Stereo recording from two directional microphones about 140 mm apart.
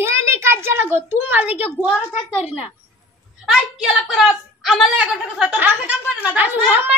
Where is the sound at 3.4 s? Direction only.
5° right (ahead or behind).